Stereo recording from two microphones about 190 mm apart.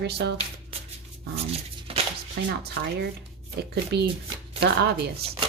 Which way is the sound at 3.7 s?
60° right (ahead or behind).